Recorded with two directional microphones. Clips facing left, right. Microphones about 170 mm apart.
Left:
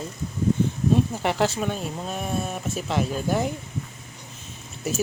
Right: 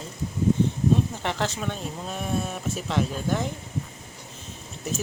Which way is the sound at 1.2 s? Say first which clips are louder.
Left 5 dB; 10° left (ahead or behind).